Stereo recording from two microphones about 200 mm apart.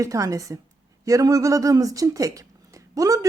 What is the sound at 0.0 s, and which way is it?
Speech, 15° right (ahead or behind).